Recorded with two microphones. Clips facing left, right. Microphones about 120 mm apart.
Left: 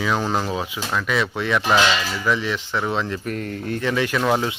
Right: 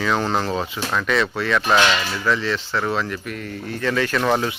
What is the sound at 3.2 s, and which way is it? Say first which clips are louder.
Speech: left 3 dB; 40° left (ahead or behind).